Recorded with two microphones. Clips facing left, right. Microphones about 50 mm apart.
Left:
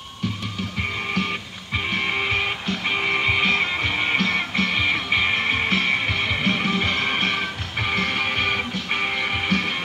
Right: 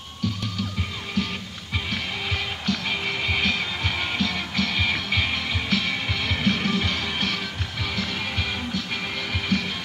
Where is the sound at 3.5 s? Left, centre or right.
Left.